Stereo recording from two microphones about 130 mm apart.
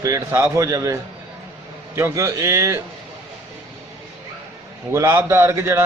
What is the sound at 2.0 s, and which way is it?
Speech, 20° right (ahead or behind).